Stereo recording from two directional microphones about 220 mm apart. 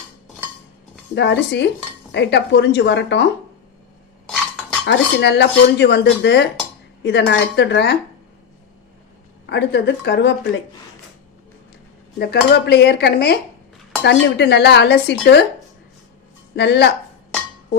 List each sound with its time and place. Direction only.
1.1 s speech: 50° left (ahead or behind)
4.9 s speech: 50° left (ahead or behind)
9.5 s speech: 50° left (ahead or behind)
12.2 s speech: 50° left (ahead or behind)
16.6 s speech: 50° left (ahead or behind)